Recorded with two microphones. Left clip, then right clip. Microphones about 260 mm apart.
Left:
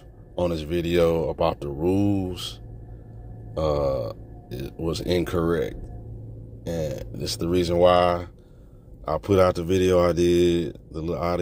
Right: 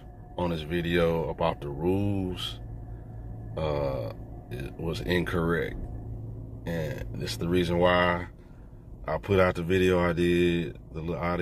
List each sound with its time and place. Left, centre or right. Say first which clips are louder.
0.4 s speech: left 5 dB; left
3.5 s speech: left 6 dB; left